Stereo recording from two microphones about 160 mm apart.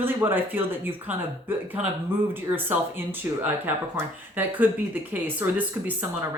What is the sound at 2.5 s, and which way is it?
A woman's voice, 10° right (ahead or behind).